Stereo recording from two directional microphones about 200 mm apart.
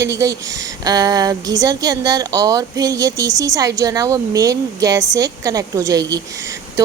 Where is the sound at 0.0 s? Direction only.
15° right (ahead or behind).